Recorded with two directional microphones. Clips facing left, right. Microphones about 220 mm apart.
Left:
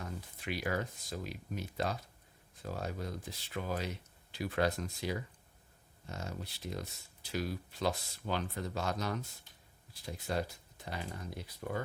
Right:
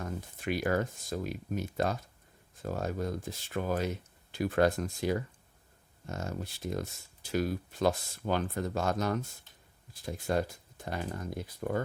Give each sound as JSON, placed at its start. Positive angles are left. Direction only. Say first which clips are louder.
{"t": 0.0, "sound": "speech", "louder": "right 6 dB", "side_deg": -50}